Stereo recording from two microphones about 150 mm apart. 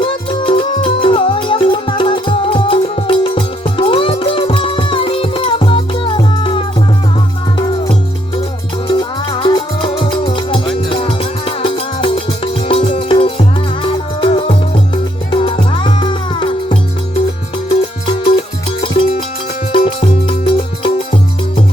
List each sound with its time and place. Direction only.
0.0 s music: 35° left (ahead or behind)
8.9 s music: 35° left (ahead or behind)
18.1 s music: 35° left (ahead or behind)